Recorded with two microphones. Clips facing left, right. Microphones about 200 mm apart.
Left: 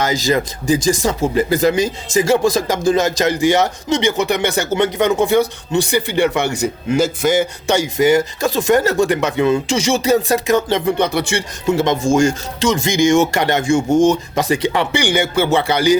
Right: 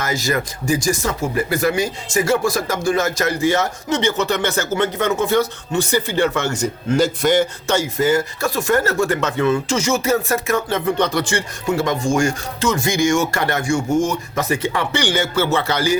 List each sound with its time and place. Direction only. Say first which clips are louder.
0.3 s speech: left 3 dB; 20° left (ahead or behind)
6.9 s a man's voice: even; 5° left (ahead or behind)
7.7 s speech: left 5 dB; 15° left (ahead or behind)
11.8 s speech: left 4 dB; 20° left (ahead or behind)